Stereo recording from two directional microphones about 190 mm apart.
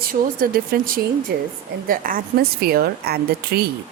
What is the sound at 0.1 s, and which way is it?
A woman's voice, 50° right (ahead or behind).